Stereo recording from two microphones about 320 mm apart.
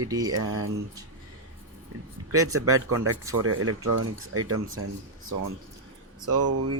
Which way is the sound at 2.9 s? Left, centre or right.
Right.